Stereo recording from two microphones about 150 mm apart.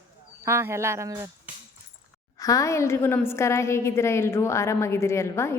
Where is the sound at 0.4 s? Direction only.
15° right (ahead or behind).